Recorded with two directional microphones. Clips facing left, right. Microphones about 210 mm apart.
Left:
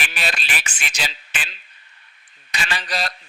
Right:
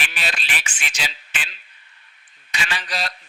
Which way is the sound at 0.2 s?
45° left (ahead or behind).